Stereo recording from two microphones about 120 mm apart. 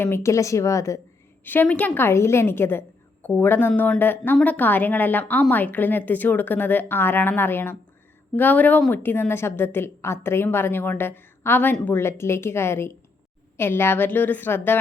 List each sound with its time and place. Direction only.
0.0 s a woman's voice: 20° left (ahead or behind)
1.5 s a woman's voice: 15° left (ahead or behind)